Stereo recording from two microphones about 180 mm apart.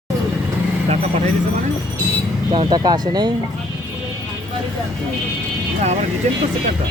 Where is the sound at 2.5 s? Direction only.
25° right (ahead or behind).